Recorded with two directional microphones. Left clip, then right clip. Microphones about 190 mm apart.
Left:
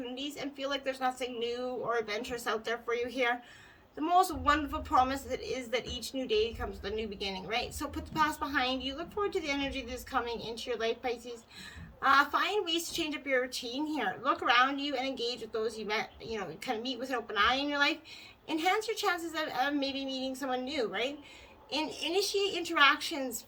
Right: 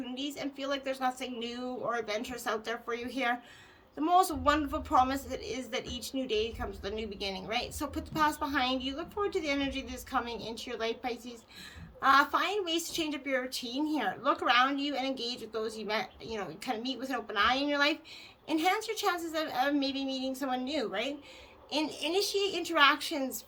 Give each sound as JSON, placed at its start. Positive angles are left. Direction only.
{"t": 0.1, "sound": "a woman's voice", "side_deg": -30}